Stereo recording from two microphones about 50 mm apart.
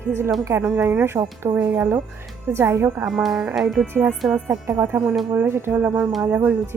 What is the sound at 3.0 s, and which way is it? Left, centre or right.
Speech, centre.